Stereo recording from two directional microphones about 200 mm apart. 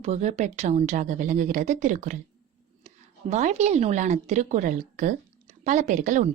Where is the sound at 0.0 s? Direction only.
35° right (ahead or behind).